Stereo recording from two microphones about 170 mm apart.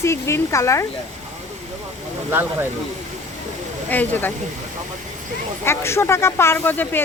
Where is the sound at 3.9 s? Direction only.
10° left (ahead or behind).